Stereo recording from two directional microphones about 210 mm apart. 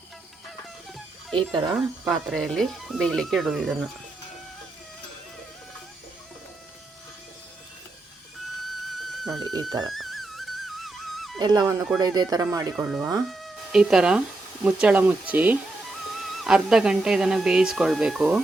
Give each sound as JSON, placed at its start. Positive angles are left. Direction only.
{"t": 1.8, "sound": "speech", "side_deg": 0}
{"t": 9.0, "sound": "music", "side_deg": 0}
{"t": 9.4, "sound": "speech", "side_deg": -20}
{"t": 9.8, "sound": "music", "side_deg": 0}
{"t": 11.3, "sound": "speech", "side_deg": -20}
{"t": 12.7, "sound": "speech", "side_deg": -5}